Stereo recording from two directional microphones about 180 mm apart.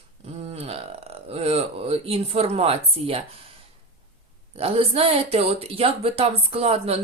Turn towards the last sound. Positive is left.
turn(degrees=-35)  # may be behind; listen again after turning